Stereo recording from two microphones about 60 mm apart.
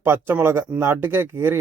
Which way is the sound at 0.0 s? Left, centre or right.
Right.